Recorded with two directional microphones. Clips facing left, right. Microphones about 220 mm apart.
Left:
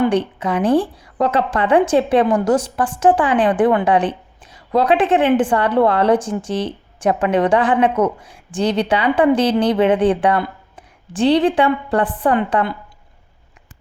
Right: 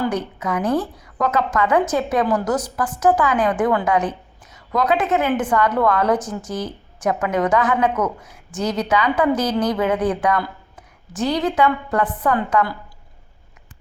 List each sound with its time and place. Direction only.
0.0 s a woman's voice: 30° left (ahead or behind)